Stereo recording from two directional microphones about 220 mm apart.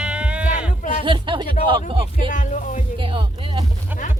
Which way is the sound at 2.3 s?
35° left (ahead or behind).